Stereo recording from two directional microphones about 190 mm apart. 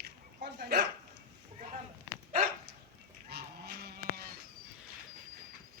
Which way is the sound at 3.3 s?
55° right (ahead or behind).